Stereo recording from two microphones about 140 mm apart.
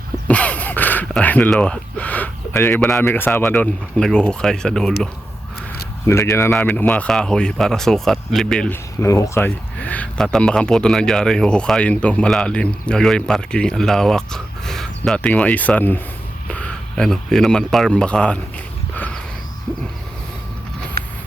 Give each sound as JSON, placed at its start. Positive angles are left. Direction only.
{"t": 0.3, "sound": "gasp", "side_deg": 10}
{"t": 3.0, "sound": "speech", "side_deg": 15}
{"t": 6.1, "sound": "speech", "side_deg": 20}
{"t": 6.5, "sound": "speech", "side_deg": 10}
{"t": 9.0, "sound": "speech", "side_deg": 20}
{"t": 21.0, "sound": "a sound", "side_deg": -90}